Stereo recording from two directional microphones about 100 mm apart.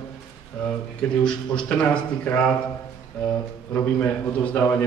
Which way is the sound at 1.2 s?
10° left (ahead or behind).